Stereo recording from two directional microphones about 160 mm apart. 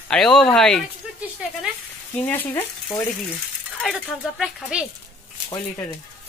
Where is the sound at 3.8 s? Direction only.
5° right (ahead or behind).